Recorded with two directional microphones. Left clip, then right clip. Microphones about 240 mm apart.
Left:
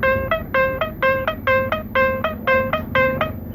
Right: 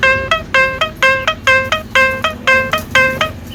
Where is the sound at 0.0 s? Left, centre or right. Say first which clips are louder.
Right 6 dB; centre.